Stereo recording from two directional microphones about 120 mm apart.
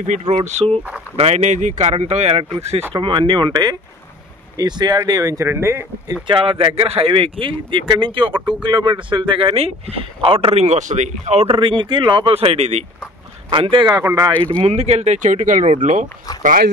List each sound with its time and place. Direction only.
0.3 s speech: 70° right (ahead or behind)
2.9 s speech: 45° right (ahead or behind); by 6.1 s 20° right (ahead or behind)
6.2 s speech: 45° right (ahead or behind)
8.4 s speech: 10° right (ahead or behind)
8.6 s speech: 40° right (ahead or behind); by 12.8 s 65° right (ahead or behind)
13.5 s speech: 45° right (ahead or behind)
14.0 s speech: 30° right (ahead or behind)
14.6 s speech: 60° right (ahead or behind); by 16.1 s 90° right